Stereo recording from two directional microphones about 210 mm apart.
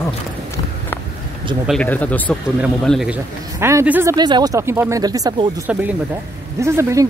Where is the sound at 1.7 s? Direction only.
5° left (ahead or behind).